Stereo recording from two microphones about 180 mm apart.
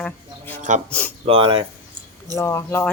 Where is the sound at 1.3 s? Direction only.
30° right (ahead or behind).